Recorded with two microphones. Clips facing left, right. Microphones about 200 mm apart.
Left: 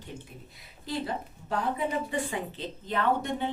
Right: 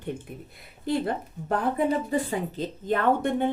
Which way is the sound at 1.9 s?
40° right (ahead or behind).